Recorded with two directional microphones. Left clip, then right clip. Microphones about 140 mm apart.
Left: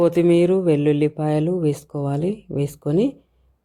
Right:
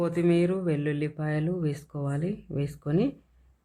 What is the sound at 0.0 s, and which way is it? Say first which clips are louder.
Speech: left 9 dB; 40° left (ahead or behind).